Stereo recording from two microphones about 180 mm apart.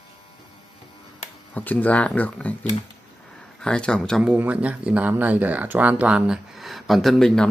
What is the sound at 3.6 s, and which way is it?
Speech, 5° left (ahead or behind).